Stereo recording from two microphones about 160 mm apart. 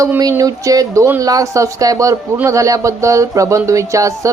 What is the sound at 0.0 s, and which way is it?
Speech, 20° right (ahead or behind).